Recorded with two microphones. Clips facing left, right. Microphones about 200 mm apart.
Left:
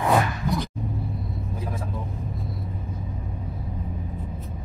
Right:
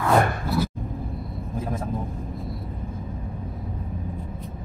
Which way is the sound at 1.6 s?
50° right (ahead or behind).